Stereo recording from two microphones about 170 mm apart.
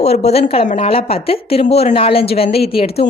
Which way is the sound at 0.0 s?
40° left (ahead or behind).